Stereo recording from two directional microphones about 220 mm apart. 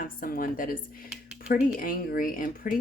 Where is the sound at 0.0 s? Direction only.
40° left (ahead or behind).